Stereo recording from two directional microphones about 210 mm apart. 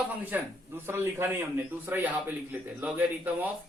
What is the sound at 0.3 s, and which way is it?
Speech, 10° right (ahead or behind).